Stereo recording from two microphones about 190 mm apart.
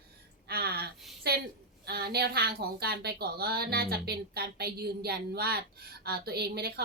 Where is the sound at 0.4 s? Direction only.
55° right (ahead or behind).